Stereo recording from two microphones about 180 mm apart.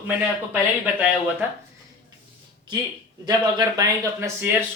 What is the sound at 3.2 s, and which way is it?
Speech, 20° right (ahead or behind).